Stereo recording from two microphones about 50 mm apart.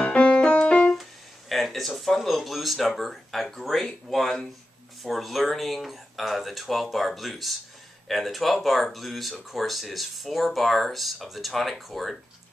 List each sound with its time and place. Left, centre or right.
0.0 s music: left
1.5 s speech: centre